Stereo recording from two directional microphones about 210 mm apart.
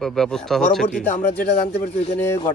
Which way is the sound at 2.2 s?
10° left (ahead or behind).